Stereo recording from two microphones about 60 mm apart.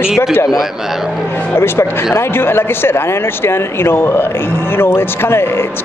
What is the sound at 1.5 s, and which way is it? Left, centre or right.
Speech, left.